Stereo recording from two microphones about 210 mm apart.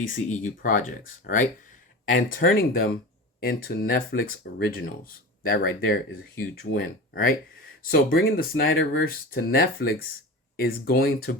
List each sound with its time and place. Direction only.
0.0 s speech: 40° left (ahead or behind)